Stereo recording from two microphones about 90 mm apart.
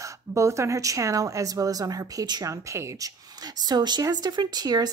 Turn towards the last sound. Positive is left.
turn(degrees=-50)  # may be behind; listen again after turning